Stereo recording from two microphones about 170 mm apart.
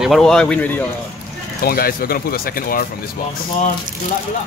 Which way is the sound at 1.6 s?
60° left (ahead or behind).